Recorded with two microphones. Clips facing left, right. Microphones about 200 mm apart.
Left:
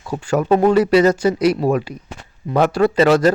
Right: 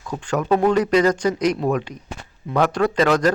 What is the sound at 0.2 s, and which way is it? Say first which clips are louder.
Speech: left 5 dB; 10° left (ahead or behind).